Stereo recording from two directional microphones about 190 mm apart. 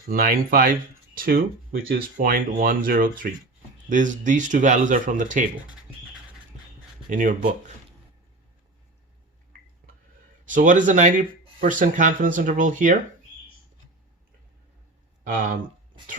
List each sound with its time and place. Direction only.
0.1 s speech: 50° right (ahead or behind)
7.1 s speech: 45° right (ahead or behind)
10.4 s speech: 45° right (ahead or behind)
15.2 s speech: 45° right (ahead or behind)